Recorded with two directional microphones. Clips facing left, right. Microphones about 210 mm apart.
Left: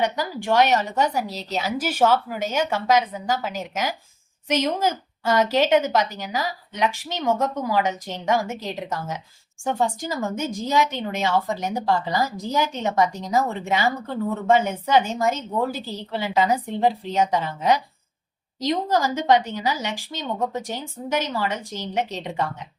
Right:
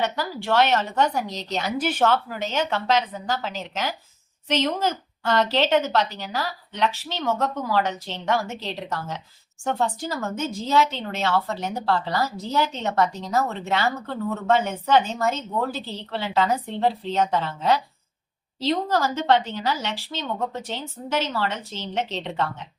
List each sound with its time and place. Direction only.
0.0 s speech: 15° left (ahead or behind)